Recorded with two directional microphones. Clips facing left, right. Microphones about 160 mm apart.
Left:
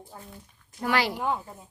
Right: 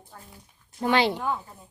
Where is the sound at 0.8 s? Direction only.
25° right (ahead or behind).